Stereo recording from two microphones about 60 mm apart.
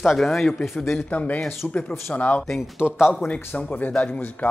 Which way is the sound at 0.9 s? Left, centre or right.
Left.